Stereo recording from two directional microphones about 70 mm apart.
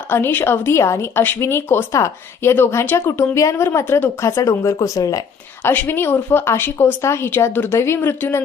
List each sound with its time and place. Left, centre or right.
0.1 s speech: left
1.9 s speech: left
2.5 s speech: left
3.3 s speech: left
5.6 s speech: left